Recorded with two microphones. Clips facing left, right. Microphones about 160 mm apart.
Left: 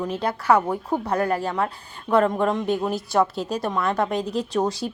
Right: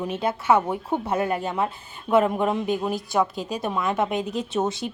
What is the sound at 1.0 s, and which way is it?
Speech, 20° right (ahead or behind).